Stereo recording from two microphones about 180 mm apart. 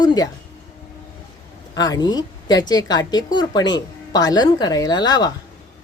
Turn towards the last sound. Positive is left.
turn(degrees=25)  # may be behind; listen again after turning